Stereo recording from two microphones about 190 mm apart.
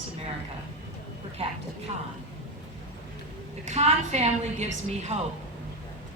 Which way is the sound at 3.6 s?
35° right (ahead or behind).